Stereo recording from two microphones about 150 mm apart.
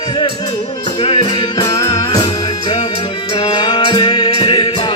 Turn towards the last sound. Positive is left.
turn(degrees=35)  # may be behind; listen again after turning